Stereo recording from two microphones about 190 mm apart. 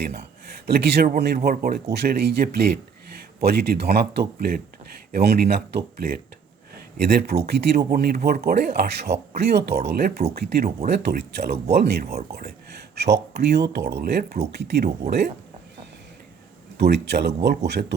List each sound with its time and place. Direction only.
0.0 s speech: 60° right (ahead or behind)
16.7 s speech: 60° right (ahead or behind)